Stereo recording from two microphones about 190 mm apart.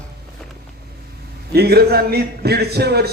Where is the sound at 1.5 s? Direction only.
55° right (ahead or behind).